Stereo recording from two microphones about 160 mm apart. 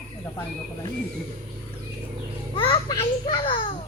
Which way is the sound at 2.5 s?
30° left (ahead or behind).